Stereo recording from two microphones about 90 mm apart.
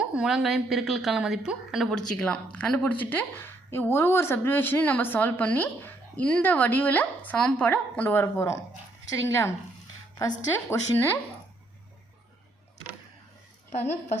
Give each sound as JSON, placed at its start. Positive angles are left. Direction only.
{"t": 0.0, "sound": "a woman's voice", "side_deg": -10}
{"t": 1.9, "sound": "speech", "side_deg": 10}
{"t": 8.2, "sound": "speech", "side_deg": 35}
{"t": 10.7, "sound": "speech", "side_deg": 25}